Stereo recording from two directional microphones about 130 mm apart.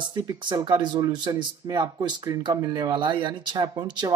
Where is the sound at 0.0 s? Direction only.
40° right (ahead or behind).